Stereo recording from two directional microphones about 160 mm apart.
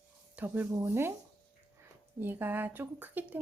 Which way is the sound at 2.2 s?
10° right (ahead or behind).